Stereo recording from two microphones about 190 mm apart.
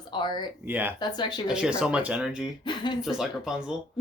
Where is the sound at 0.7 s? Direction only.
10° right (ahead or behind).